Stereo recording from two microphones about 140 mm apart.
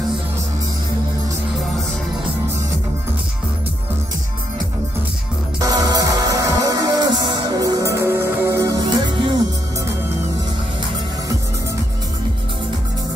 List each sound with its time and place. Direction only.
5.7 s music: 25° right (ahead or behind)